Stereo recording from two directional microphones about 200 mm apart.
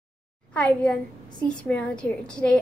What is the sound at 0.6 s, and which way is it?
A woman's voice, 5° left (ahead or behind).